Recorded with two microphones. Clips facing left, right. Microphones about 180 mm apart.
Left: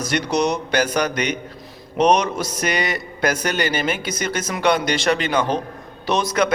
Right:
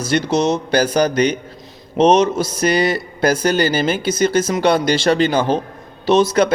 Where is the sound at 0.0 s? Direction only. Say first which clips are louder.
Right 3 dB; 30° right (ahead or behind).